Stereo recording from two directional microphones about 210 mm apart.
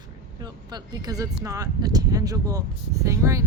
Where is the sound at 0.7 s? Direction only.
15° right (ahead or behind).